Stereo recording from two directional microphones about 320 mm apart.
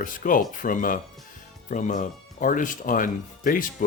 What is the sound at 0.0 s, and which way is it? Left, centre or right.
Speech, left.